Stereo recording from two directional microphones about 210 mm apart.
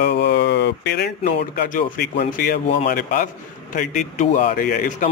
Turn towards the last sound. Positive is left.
turn(degrees=40)  # may be behind; listen again after turning